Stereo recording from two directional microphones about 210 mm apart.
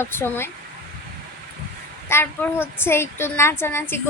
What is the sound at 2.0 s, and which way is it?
A woman's voice, 10° left (ahead or behind).